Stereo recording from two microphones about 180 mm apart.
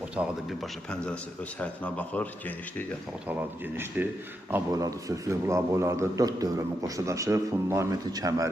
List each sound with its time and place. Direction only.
0.2 s speech: centre (ahead or behind)
3.8 s a man's voice: 10° right (ahead or behind)